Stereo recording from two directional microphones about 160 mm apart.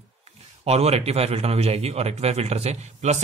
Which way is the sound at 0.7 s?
40° right (ahead or behind).